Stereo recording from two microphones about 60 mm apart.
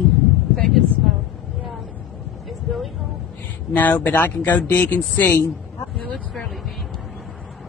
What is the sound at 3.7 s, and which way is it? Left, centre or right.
A woman's voice, left.